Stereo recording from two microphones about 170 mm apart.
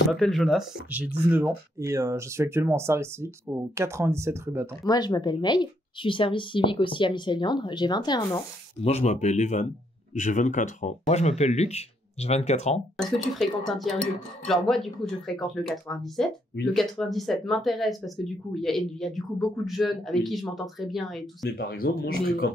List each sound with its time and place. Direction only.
0.1 s speech: centre (ahead or behind); by 4.6 s 15° right (ahead or behind)
4.8 s a woman's voice: 25° left (ahead or behind)
8.8 s speech: 40° left (ahead or behind)
12.9 s speech: centre (ahead or behind)
21.5 s speech: 65° left (ahead or behind)